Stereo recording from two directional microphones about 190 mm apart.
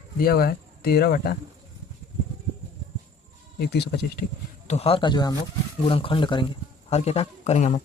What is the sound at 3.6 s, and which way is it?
Speech, 60° left (ahead or behind).